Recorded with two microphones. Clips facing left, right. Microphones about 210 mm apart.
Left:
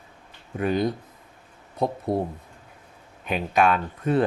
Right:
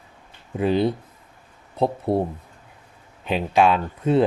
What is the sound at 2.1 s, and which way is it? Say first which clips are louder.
Speech: right 3 dB; 30° right (ahead or behind).